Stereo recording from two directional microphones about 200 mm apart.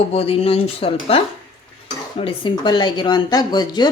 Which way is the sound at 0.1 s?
30° left (ahead or behind).